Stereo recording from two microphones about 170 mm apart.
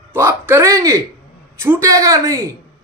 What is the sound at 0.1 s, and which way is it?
A man's voice, 15° right (ahead or behind).